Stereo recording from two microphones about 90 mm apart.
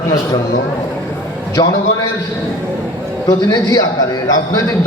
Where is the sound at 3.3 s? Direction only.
40° left (ahead or behind).